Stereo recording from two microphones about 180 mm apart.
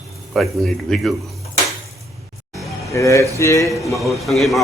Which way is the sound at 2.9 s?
15° left (ahead or behind).